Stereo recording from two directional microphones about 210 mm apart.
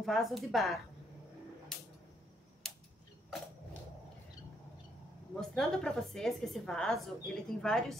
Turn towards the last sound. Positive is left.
turn(degrees=5)  # may be behind; listen again after turning